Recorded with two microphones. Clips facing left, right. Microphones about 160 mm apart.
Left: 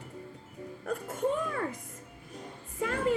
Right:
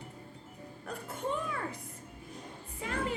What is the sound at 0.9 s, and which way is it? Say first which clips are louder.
Music: left 6 dB; 45° left (ahead or behind).